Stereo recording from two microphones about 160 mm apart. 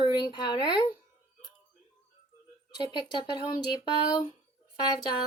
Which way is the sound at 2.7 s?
25° left (ahead or behind).